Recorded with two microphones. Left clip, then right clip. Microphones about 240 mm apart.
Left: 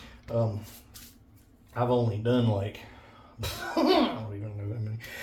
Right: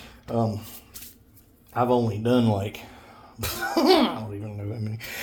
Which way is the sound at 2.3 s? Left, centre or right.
Right.